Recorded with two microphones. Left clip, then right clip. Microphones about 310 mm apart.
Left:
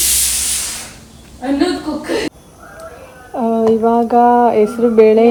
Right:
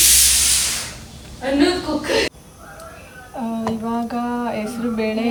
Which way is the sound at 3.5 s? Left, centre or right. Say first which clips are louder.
Left 13 dB; right.